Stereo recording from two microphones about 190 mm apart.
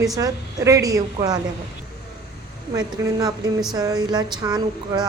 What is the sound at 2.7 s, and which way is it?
A woman's voice, 20° right (ahead or behind).